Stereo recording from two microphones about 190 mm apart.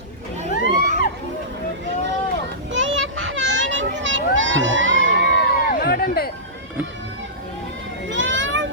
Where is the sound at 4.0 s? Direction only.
75° right (ahead or behind).